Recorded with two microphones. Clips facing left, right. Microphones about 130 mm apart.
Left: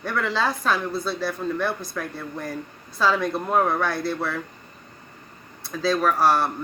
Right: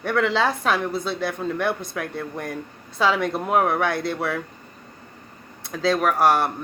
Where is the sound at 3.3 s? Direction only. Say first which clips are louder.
Right 1 dB; 25° right (ahead or behind).